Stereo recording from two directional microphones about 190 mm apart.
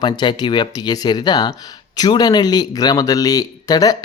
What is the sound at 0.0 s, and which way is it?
Speech, 25° left (ahead or behind).